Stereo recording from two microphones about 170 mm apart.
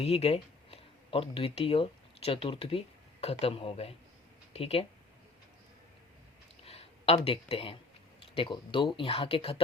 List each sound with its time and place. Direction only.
0.0 s speech: 35° left (ahead or behind)
6.7 s a sound: 35° left (ahead or behind)
7.3 s speech: 35° left (ahead or behind)